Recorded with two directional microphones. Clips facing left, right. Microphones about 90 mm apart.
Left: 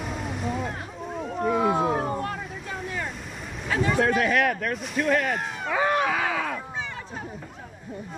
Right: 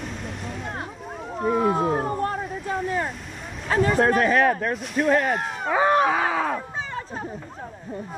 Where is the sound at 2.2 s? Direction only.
40° right (ahead or behind).